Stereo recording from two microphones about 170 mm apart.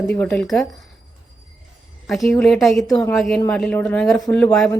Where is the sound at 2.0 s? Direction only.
Centre (ahead or behind).